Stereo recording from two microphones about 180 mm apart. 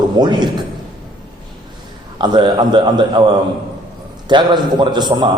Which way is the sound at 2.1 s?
25° right (ahead or behind).